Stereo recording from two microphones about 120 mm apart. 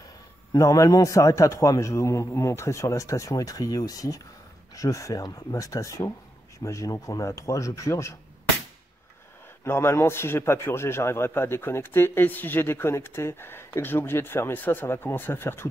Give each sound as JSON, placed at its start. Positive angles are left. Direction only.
{"t": 0.6, "sound": "a man's voice", "side_deg": 30}
{"t": 9.7, "sound": "a man's voice", "side_deg": 20}